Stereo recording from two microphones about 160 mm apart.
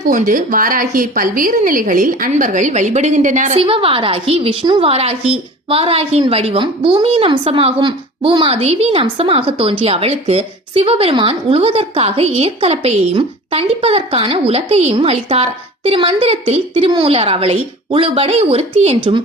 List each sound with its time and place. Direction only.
0.1 s a woman's voice: 55° right (ahead or behind)
3.6 s a woman's voice: 35° right (ahead or behind)